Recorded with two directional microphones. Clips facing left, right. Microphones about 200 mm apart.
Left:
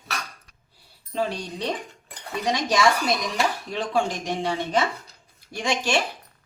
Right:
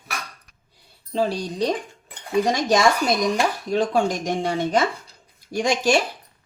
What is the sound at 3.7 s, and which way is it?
Speech, 45° right (ahead or behind).